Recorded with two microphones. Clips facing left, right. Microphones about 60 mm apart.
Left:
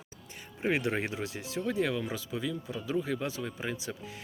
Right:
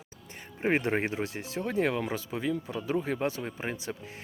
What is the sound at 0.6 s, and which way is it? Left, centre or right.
Speech, right.